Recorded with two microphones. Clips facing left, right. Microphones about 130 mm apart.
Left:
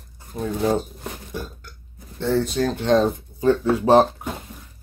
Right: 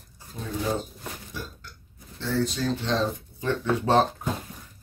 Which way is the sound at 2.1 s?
55° left (ahead or behind).